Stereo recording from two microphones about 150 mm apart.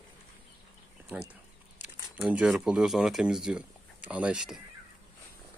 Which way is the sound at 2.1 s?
5° right (ahead or behind).